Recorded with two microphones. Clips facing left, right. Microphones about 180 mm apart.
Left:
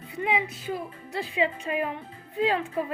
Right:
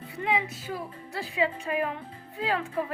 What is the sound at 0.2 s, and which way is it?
A woman's voice, 15° left (ahead or behind).